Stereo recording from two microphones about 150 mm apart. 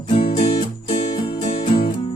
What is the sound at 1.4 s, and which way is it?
Music, 40° left (ahead or behind).